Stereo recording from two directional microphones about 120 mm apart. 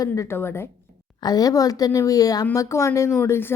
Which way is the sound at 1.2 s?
35° left (ahead or behind).